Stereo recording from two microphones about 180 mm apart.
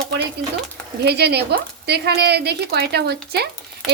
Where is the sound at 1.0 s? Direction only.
65° right (ahead or behind).